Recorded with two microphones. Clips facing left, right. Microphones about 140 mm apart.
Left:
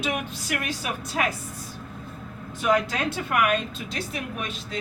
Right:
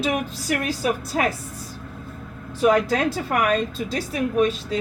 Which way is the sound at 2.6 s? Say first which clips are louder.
Right 5 dB; 35° right (ahead or behind).